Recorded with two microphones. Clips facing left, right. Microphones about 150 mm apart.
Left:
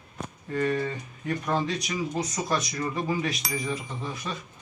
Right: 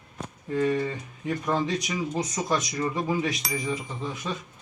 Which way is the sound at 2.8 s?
15° right (ahead or behind).